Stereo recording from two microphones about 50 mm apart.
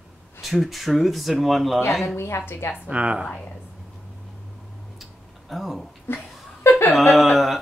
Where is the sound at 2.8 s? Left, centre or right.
Right.